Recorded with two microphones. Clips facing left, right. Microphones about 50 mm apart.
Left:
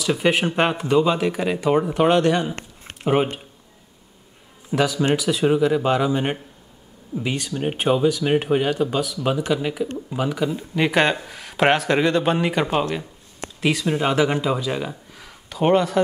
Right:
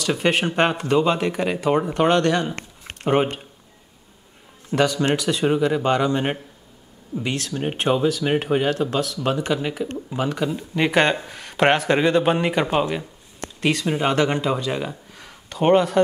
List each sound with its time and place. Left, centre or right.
0.0 s speech: centre
4.7 s speech: centre